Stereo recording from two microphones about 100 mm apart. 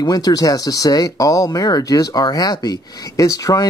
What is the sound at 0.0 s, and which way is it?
Speech, 40° left (ahead or behind).